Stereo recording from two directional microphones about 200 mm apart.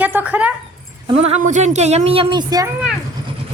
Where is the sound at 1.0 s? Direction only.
30° right (ahead or behind).